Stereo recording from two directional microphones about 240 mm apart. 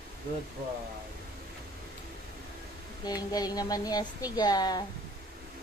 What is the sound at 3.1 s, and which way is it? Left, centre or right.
A woman's voice, centre.